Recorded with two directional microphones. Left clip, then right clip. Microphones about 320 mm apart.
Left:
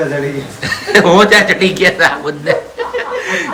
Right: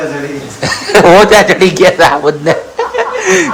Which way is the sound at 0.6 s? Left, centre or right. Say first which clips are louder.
Right 4 dB; centre.